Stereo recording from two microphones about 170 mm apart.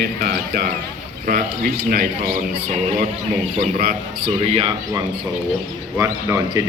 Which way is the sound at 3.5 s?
50° right (ahead or behind).